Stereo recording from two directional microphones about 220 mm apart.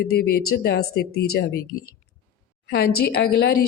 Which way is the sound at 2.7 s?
50° left (ahead or behind).